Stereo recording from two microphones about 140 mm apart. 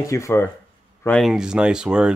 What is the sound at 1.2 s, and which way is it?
Speech, 5° right (ahead or behind).